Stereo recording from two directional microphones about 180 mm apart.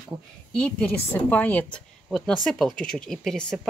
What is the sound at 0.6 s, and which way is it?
A woman's voice, 10° left (ahead or behind).